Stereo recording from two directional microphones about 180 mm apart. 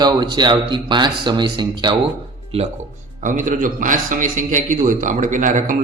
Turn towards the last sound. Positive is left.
turn(degrees=-45)  # may be behind; listen again after turning